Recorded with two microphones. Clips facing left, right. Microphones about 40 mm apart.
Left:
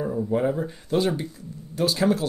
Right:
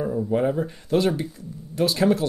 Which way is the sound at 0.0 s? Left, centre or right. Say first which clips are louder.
Right 1 dB; centre.